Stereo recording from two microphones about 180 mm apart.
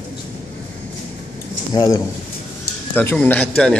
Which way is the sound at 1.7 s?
20° left (ahead or behind).